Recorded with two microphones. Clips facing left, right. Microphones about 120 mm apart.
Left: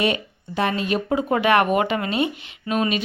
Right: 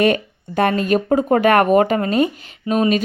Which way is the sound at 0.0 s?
50° right (ahead or behind).